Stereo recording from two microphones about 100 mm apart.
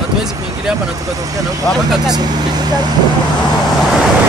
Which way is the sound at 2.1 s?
40° right (ahead or behind).